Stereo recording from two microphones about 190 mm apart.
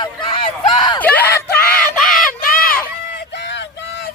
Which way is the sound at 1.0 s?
10° left (ahead or behind).